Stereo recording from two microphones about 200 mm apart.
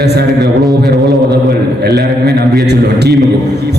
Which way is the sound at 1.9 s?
55° right (ahead or behind).